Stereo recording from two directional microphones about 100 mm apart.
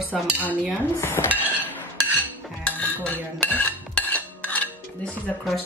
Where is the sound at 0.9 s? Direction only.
25° left (ahead or behind).